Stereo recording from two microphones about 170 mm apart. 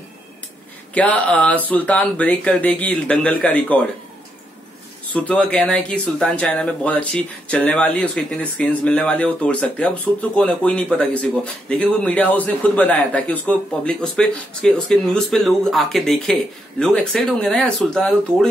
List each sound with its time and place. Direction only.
0.9 s speech: 10° left (ahead or behind)
5.1 s speech: 10° left (ahead or behind)